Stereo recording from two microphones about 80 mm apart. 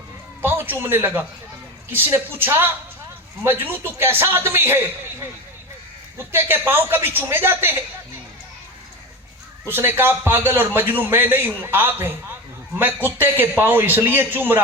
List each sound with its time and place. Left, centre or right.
0.4 s a man's voice: right
6.1 s a man's voice: right
9.6 s a man's voice: right